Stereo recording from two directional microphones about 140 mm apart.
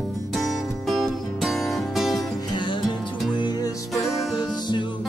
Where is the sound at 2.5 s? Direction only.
35° left (ahead or behind).